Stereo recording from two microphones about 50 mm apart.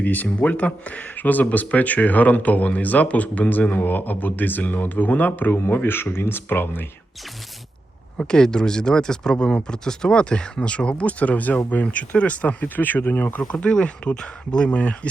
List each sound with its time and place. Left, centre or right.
0.0 s speech: left
5.5 s speech: left
8.2 s speech: centre; by 13.4 s left
13.5 s speech: left